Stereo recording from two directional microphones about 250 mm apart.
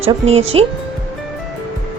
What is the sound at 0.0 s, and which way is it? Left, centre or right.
Speech, right.